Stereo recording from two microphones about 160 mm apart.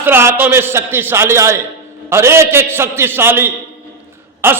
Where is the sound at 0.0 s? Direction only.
15° right (ahead or behind).